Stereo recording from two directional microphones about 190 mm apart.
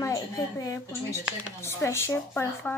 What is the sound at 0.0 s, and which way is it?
Speech, 20° left (ahead or behind).